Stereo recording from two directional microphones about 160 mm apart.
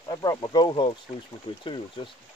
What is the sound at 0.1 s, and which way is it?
Speech, 25° left (ahead or behind).